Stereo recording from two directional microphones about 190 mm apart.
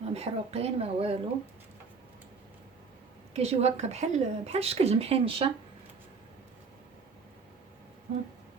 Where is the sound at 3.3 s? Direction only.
35° right (ahead or behind).